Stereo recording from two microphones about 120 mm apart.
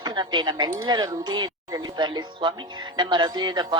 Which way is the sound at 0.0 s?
35° right (ahead or behind).